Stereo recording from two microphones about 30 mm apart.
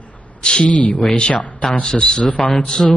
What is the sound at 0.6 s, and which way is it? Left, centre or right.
Speech, left.